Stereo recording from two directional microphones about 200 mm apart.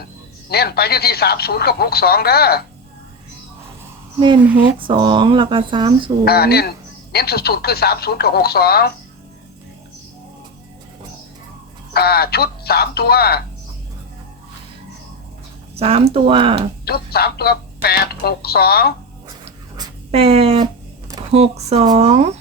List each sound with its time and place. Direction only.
0.5 s speech: 50° left (ahead or behind)
4.8 s speech: 25° right (ahead or behind)
6.2 s speech: 50° left (ahead or behind)
11.9 s speech: 50° left (ahead or behind)
15.7 s speech: 30° right (ahead or behind)
16.8 s speech: 50° left (ahead or behind)
19.7 s a sound: 25° right (ahead or behind)
21.3 s speech: 30° right (ahead or behind)